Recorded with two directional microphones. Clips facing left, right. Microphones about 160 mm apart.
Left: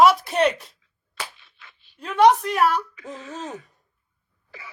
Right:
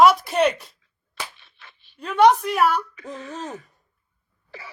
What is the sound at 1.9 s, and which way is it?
Speech, centre (ahead or behind).